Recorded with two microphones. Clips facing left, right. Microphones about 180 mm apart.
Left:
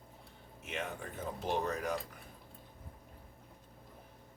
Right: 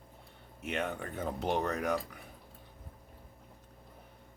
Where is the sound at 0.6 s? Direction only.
65° right (ahead or behind).